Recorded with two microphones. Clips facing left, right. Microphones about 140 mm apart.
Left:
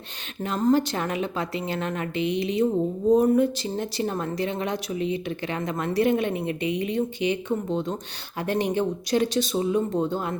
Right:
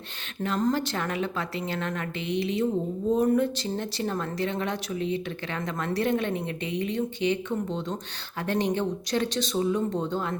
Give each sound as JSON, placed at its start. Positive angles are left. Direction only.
{"t": 0.4, "sound": "speech", "side_deg": 15}